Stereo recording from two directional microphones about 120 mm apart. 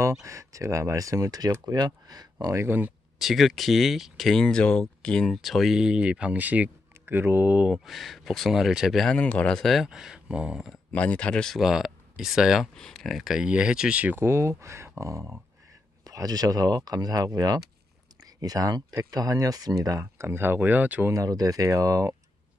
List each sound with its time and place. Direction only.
0.2 s speech: 25° right (ahead or behind)
2.4 s speech: 20° right (ahead or behind)
3.2 s speech: centre (ahead or behind)
10.9 s speech: 10° left (ahead or behind); by 21.1 s 15° right (ahead or behind)
21.1 s speech: 30° right (ahead or behind)